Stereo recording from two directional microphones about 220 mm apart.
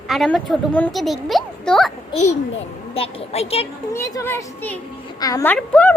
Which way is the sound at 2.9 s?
25° left (ahead or behind).